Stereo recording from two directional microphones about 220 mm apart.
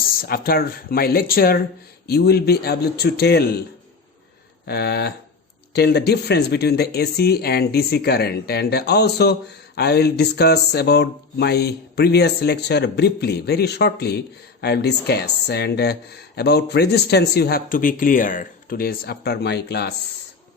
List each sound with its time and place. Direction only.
0.2 s speech: 45° left (ahead or behind)
4.6 s speech: 50° left (ahead or behind)